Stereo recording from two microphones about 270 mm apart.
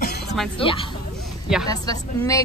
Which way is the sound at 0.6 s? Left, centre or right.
Centre.